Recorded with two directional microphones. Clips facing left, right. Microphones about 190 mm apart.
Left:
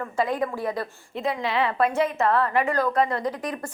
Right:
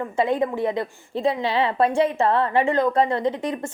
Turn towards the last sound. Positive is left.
turn(degrees=-25)  # may be behind; listen again after turning